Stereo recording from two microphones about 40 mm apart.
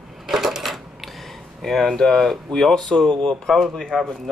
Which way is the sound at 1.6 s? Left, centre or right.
Centre.